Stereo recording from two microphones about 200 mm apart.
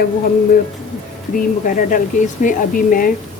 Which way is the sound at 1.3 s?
40° left (ahead or behind).